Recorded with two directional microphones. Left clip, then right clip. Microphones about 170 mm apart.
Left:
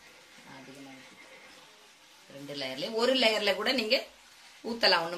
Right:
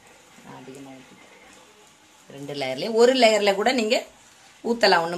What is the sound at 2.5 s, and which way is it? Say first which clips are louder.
Speech: right 9 dB; 65° right (ahead or behind).